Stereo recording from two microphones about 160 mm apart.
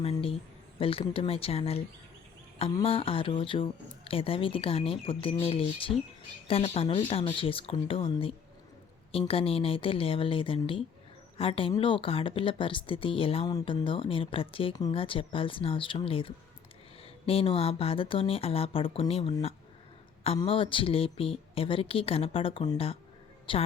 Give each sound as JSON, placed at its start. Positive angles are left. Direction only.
{"t": 0.0, "sound": "speech", "side_deg": 35}